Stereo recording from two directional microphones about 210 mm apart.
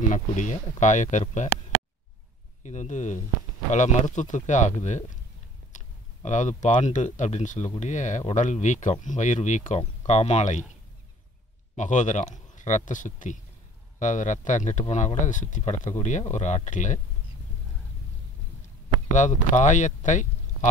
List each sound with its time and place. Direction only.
0.1 s speech: 35° left (ahead or behind)
2.6 s speech: 35° left (ahead or behind)
6.2 s speech: 35° left (ahead or behind)
11.7 s speech: 35° left (ahead or behind)
19.1 s speech: 35° left (ahead or behind)